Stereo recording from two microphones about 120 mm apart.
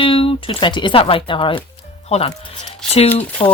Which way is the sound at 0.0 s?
50° left (ahead or behind).